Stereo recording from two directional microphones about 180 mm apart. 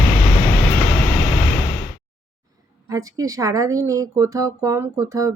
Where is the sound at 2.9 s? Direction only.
20° right (ahead or behind).